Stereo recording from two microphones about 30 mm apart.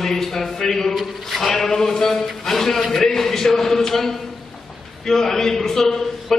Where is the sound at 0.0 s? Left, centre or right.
Centre.